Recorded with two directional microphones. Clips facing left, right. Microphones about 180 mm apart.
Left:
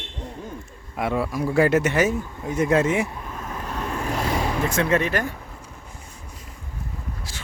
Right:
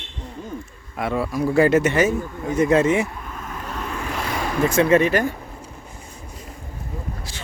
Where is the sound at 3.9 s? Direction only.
40° left (ahead or behind).